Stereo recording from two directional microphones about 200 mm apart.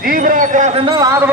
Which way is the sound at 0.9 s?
20° right (ahead or behind).